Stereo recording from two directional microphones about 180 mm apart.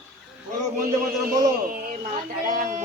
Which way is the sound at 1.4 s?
50° right (ahead or behind).